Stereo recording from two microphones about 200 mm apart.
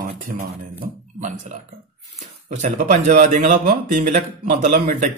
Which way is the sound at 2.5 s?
40° right (ahead or behind).